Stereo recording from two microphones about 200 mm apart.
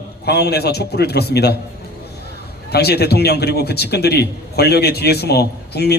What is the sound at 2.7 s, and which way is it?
A man's voice, 55° left (ahead or behind).